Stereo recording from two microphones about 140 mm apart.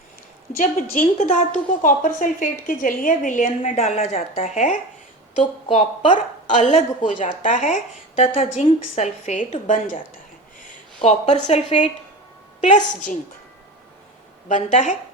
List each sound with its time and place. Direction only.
0.5 s a woman's voice: 65° left (ahead or behind)
5.6 s a woman's voice: 40° left (ahead or behind)
6.1 s a woman's voice: 60° left (ahead or behind)
8.3 s a woman's voice: 45° left (ahead or behind); by 10.0 s 65° left (ahead or behind)
10.6 s a sound: 55° left (ahead or behind)
11.4 s a woman's voice: 55° left (ahead or behind)
14.4 s a woman's voice: 60° left (ahead or behind)